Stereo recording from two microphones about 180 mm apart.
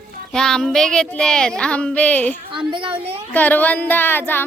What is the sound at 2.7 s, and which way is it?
Speech, 30° right (ahead or behind).